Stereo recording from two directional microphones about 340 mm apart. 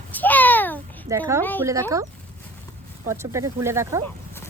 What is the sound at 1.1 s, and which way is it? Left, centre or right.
Speech, centre.